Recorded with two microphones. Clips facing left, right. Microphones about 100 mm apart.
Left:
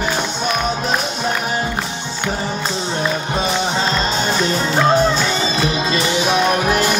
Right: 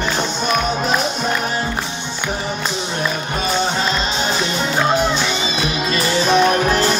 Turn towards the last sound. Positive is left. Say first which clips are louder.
# right 2 dB
turn(degrees=5)  # may be behind; listen again after turning